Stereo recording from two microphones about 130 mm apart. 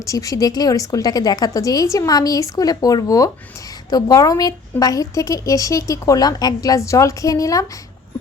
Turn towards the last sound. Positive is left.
turn(degrees=25)  # may be behind; listen again after turning